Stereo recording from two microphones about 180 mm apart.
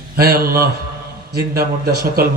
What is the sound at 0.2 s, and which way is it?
A man's voice, 55° right (ahead or behind).